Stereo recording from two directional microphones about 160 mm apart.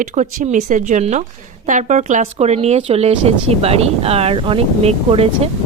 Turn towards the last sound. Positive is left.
turn(degrees=-40)  # may be behind; listen again after turning